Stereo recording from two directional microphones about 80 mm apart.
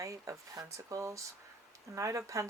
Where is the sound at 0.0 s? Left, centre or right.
Right.